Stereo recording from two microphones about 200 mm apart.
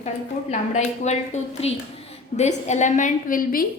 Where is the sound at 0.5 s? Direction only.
35° left (ahead or behind).